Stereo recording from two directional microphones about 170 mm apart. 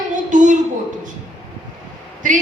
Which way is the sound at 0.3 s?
50° right (ahead or behind).